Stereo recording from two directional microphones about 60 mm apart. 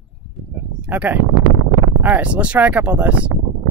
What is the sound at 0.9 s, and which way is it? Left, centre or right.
Speech, right.